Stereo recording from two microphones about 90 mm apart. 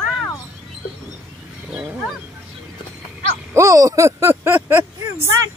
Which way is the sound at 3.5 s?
35° right (ahead or behind).